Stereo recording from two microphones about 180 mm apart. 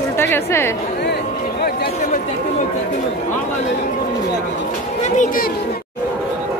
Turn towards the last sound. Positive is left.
turn(degrees=45)  # may be behind; listen again after turning